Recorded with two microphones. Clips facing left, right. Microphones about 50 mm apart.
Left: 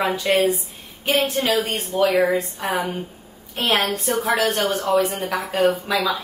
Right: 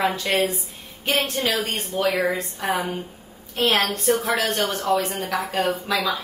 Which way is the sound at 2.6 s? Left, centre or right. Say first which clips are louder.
Left 1 dB; left.